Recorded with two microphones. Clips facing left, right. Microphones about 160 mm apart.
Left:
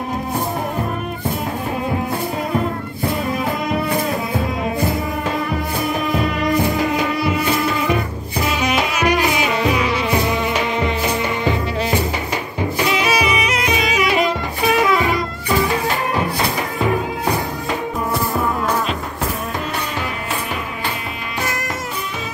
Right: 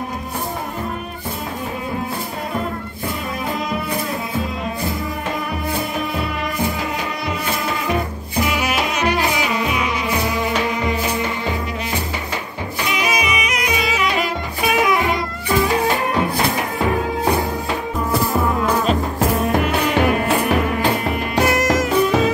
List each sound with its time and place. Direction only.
8.9 s music: 15° left (ahead or behind)
12.9 s music: 30° left (ahead or behind)
13.8 s saxophone: 15° left (ahead or behind)
19.5 s music: 65° right (ahead or behind)
21.4 s music: 70° right (ahead or behind)